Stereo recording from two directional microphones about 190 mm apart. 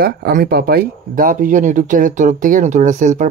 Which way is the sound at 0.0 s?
50° right (ahead or behind).